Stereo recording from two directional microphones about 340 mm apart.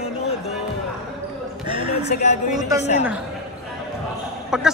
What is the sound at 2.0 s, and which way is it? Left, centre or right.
Speech, centre.